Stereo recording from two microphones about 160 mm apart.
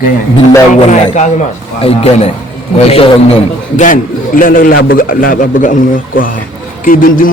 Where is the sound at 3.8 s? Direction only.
55° left (ahead or behind).